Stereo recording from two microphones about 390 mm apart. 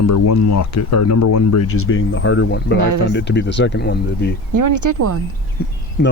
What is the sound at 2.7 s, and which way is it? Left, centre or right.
Speech, right.